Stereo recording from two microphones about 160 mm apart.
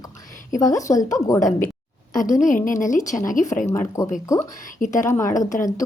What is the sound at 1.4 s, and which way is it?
A woman's voice, 50° left (ahead or behind).